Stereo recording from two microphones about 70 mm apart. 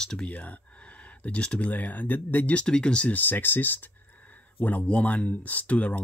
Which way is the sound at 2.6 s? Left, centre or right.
Centre.